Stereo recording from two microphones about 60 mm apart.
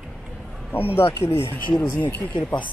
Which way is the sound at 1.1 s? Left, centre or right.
Left.